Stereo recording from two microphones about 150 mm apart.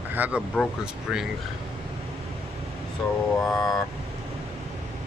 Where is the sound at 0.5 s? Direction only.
Centre (ahead or behind).